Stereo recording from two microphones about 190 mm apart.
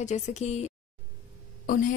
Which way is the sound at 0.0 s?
35° left (ahead or behind).